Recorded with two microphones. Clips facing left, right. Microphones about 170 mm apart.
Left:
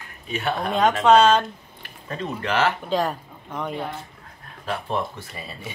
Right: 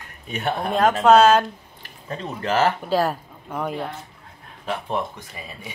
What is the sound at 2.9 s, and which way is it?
Speech, 5° right (ahead or behind).